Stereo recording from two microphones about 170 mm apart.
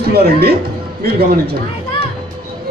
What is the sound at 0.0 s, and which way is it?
Speech, 70° right (ahead or behind).